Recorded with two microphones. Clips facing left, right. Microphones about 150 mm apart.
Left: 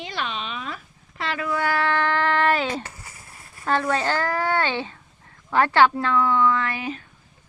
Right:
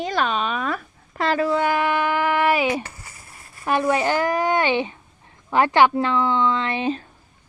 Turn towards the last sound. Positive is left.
turn(degrees=-30)  # may be behind; listen again after turning